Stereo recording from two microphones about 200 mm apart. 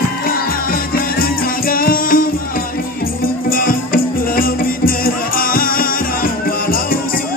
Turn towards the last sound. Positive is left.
turn(degrees=45)  # may be behind; listen again after turning